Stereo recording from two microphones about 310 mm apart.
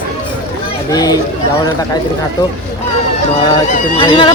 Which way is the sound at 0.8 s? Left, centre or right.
Centre.